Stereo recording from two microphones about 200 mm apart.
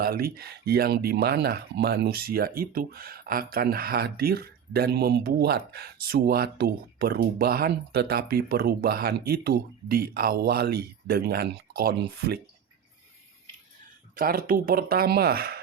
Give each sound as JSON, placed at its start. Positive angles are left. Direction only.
{"t": 0.0, "sound": "speech", "side_deg": -50}
{"t": 14.2, "sound": "speech", "side_deg": -45}